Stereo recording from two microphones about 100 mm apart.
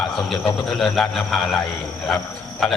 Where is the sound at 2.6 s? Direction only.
Centre (ahead or behind).